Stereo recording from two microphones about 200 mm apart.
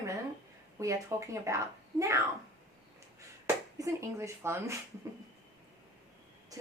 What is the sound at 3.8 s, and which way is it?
Speech, 15° right (ahead or behind).